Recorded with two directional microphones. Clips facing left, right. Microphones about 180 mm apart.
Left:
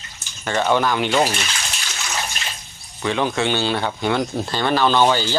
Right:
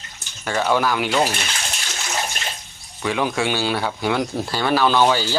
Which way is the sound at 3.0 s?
10° right (ahead or behind).